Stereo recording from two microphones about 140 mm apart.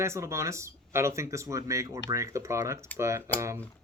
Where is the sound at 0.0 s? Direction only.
20° right (ahead or behind).